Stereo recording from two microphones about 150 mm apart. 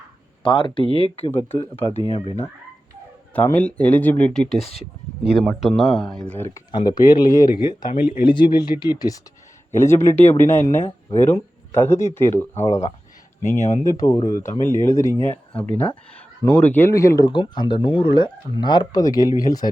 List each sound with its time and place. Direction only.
0.4 s speech: 35° left (ahead or behind)
3.3 s speech: 10° left (ahead or behind)
6.7 s speech: 30° left (ahead or behind)
13.8 s speech: 25° left (ahead or behind)